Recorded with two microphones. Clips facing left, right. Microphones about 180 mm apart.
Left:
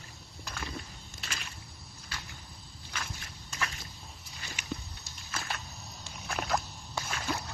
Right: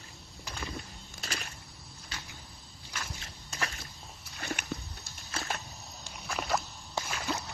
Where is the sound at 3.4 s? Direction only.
35° right (ahead or behind).